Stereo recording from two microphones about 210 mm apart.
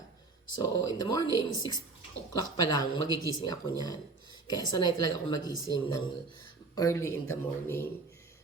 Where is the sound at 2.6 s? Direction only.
20° left (ahead or behind).